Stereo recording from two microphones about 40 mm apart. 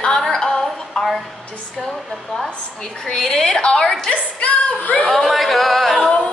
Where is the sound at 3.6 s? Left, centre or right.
Left.